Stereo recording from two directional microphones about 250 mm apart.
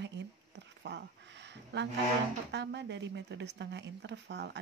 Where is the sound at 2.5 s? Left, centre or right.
Right.